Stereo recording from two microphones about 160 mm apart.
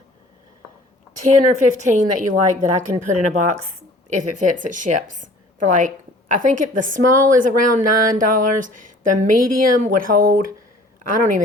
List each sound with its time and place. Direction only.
1.2 s a woman's voice: 50° right (ahead or behind)